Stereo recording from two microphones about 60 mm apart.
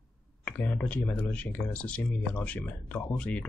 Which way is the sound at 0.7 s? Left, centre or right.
Left.